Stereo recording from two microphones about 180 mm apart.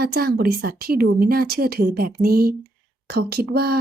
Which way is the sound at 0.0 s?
60° right (ahead or behind).